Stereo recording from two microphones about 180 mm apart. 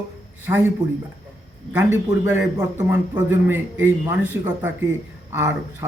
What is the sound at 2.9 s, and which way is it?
A man's voice, 10° right (ahead or behind).